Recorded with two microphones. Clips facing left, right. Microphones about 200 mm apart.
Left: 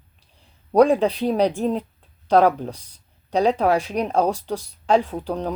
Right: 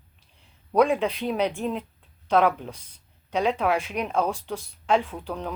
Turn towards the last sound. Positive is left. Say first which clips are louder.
# left 6 dB
turn(degrees=35)  # may be behind; listen again after turning